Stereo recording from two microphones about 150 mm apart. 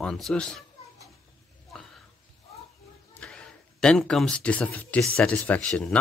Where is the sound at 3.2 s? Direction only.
5° left (ahead or behind).